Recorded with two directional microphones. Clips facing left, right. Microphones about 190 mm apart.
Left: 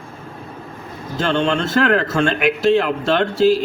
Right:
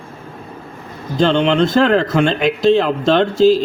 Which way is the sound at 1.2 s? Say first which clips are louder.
Right 5 dB; 20° right (ahead or behind).